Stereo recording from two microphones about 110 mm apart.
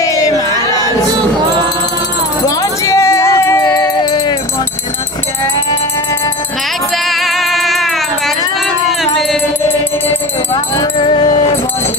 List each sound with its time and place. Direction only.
0.0 s choir: 30° left (ahead or behind)
2.4 s a sound: 30° left (ahead or behind)
7.1 s music: centre (ahead or behind)
11.0 s music: 50° left (ahead or behind)